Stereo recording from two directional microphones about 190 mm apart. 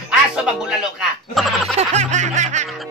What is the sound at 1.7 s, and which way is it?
Music, 35° right (ahead or behind).